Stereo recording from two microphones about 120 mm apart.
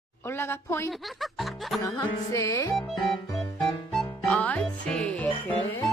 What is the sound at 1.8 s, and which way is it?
Speech, 30° left (ahead or behind).